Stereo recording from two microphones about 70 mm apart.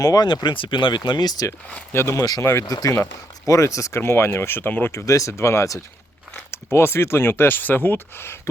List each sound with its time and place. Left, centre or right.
0.0 s speech: left
1.9 s speech: left
2.6 s speech: left
3.4 s speech: left
6.5 s speech: left